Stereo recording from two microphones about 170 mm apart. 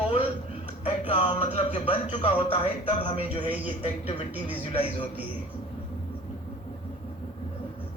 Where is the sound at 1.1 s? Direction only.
30° left (ahead or behind).